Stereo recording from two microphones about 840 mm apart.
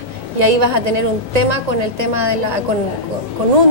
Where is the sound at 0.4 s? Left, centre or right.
Right.